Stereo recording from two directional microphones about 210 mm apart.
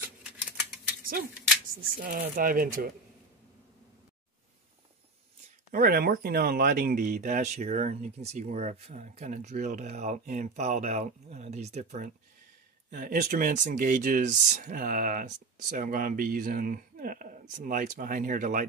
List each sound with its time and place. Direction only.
0.2 s typewriter: 5° right (ahead or behind)
2.0 s speech: 40° right (ahead or behind)
5.7 s speech: 45° right (ahead or behind)